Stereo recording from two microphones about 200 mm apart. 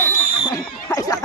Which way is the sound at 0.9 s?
20° left (ahead or behind).